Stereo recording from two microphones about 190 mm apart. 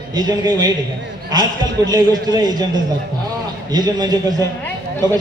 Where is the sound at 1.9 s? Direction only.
20° right (ahead or behind).